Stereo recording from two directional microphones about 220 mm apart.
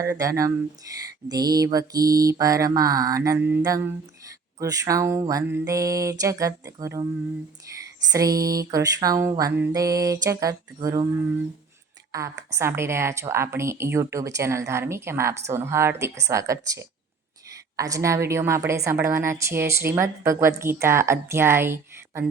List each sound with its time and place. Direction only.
0.0 s speech: 15° right (ahead or behind)
8.1 s speech: 15° right (ahead or behind)